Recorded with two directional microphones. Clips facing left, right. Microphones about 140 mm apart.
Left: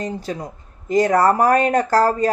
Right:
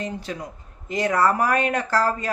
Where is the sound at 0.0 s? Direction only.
35° left (ahead or behind).